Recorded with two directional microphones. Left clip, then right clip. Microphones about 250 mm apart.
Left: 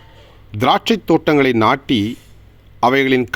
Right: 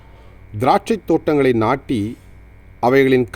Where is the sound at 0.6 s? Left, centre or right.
Centre.